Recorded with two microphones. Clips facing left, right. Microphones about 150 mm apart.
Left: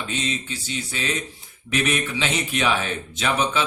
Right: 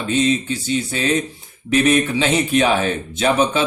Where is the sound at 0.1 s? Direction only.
40° right (ahead or behind).